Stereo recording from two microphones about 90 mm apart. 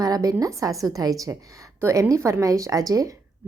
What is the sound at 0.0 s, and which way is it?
A woman's voice, 40° right (ahead or behind).